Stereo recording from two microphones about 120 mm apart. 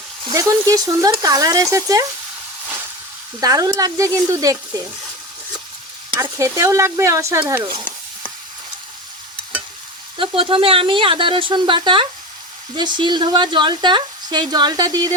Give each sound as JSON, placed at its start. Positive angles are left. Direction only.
{"t": 0.3, "sound": "speech", "side_deg": -30}
{"t": 3.4, "sound": "speech", "side_deg": -30}
{"t": 6.4, "sound": "speech", "side_deg": -25}
{"t": 10.2, "sound": "speech", "side_deg": -50}